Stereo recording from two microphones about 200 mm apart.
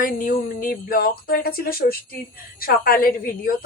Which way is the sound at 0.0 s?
45° left (ahead or behind).